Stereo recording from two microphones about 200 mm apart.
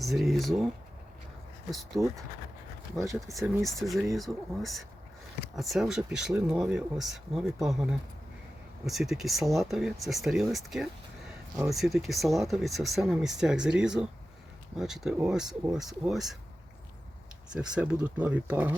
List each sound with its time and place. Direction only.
0.0 s speech: centre (ahead or behind)
1.7 s speech: centre (ahead or behind)
3.0 s speech: 15° right (ahead or behind)
3.3 s speech: 5° right (ahead or behind)
17.5 s speech: 5° right (ahead or behind)